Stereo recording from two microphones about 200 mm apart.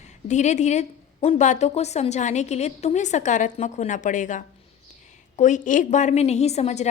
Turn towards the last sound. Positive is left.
turn(degrees=35)  # may be behind; listen again after turning